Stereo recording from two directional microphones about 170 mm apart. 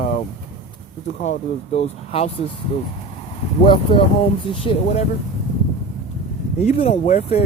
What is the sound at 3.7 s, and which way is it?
Speech, 30° left (ahead or behind).